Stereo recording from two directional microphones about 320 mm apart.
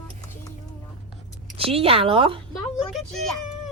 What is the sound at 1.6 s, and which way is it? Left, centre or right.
Speech, centre.